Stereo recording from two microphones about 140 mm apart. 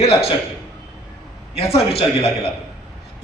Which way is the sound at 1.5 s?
45° left (ahead or behind).